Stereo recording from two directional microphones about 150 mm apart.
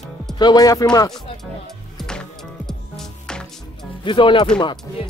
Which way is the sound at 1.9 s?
5° left (ahead or behind).